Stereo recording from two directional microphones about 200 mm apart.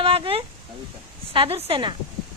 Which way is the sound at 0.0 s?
30° right (ahead or behind).